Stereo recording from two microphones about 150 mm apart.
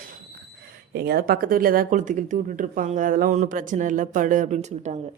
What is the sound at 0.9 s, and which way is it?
Speech, 90° right.